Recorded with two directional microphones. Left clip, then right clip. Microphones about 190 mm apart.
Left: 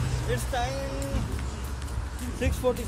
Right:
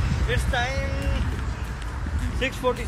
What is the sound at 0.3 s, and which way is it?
Speech, 40° left (ahead or behind).